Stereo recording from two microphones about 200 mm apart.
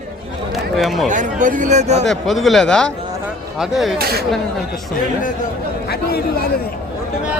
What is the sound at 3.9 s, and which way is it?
Speech, 50° right (ahead or behind).